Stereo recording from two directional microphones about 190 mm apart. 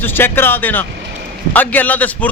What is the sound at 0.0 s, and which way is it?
A man's voice, 10° left (ahead or behind).